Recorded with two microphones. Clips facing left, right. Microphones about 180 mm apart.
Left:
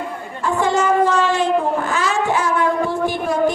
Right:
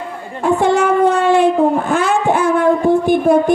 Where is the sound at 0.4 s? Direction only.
60° right (ahead or behind).